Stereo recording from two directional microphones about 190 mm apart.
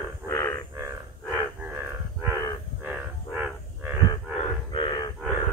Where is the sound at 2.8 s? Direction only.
5° right (ahead or behind).